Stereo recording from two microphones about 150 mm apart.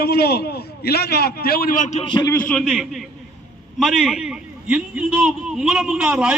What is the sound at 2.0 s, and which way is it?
Speech, 30° left (ahead or behind).